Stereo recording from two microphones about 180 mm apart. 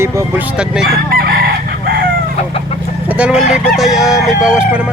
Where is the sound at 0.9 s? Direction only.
60° right (ahead or behind).